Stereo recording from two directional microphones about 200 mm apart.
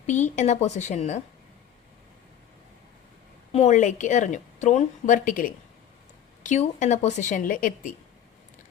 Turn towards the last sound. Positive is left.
turn(degrees=40)  # may be behind; listen again after turning